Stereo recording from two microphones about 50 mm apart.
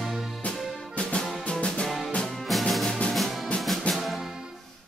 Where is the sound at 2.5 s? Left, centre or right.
Centre.